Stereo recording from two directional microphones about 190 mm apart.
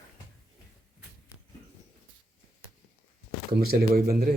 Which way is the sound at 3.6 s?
50° right (ahead or behind).